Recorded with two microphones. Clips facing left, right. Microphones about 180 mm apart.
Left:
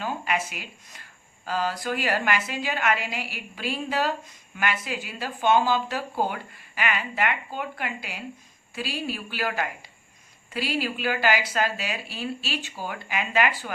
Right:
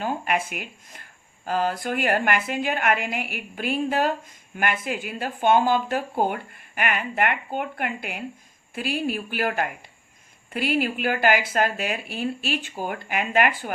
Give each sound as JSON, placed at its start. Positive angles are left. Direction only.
{"t": 0.0, "sound": "speech", "side_deg": -50}